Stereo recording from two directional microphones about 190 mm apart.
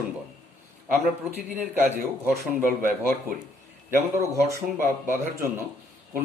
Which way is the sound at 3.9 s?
15° right (ahead or behind).